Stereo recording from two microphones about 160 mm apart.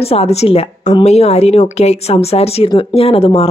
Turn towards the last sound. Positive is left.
turn(degrees=35)  # may be behind; listen again after turning